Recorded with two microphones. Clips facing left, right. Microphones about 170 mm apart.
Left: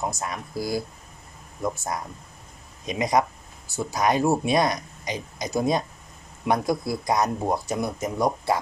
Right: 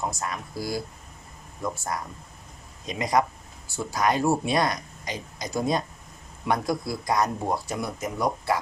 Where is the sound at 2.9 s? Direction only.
15° left (ahead or behind).